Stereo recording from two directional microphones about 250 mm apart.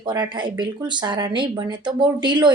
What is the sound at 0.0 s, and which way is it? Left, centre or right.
Speech, centre.